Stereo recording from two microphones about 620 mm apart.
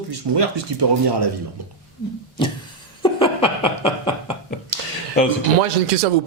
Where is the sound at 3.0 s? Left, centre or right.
Centre.